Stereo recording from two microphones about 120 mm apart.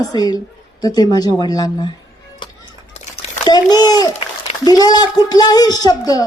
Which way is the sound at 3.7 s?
35° left (ahead or behind).